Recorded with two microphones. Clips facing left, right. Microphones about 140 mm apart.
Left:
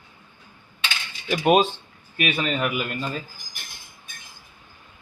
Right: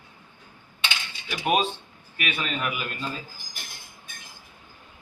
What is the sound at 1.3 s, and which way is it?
Speech, 35° left (ahead or behind).